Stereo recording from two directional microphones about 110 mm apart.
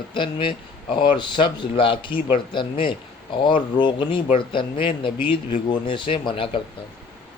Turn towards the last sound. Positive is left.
turn(degrees=50)  # may be behind; listen again after turning